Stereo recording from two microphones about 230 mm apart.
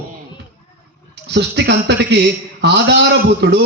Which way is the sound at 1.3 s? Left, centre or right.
Right.